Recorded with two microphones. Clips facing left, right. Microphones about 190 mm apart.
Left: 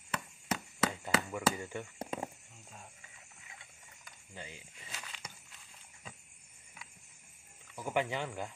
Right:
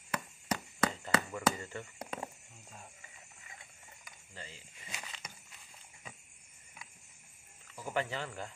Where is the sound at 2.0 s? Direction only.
20° left (ahead or behind).